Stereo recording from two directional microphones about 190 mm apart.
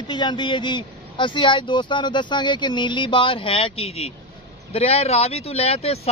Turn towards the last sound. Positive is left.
turn(degrees=30)  # may be behind; listen again after turning